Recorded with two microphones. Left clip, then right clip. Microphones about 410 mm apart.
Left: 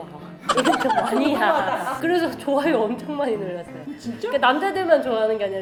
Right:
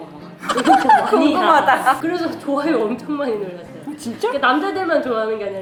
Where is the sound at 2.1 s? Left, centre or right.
Left.